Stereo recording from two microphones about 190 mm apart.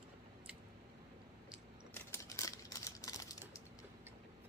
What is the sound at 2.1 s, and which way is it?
Typing, 15° left (ahead or behind).